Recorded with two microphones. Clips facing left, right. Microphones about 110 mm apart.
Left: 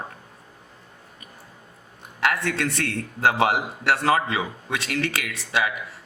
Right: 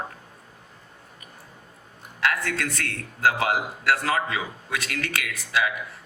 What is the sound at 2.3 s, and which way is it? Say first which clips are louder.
A man's voice: left 2 dB; 25° left (ahead or behind).